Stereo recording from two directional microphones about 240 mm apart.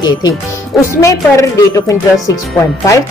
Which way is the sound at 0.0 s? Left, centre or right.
Centre.